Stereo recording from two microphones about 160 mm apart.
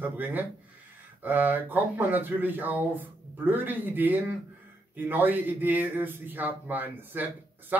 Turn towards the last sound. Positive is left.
turn(degrees=-10)  # may be behind; listen again after turning